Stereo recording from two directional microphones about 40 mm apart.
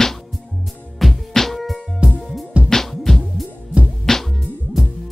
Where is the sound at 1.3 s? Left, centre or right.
Centre.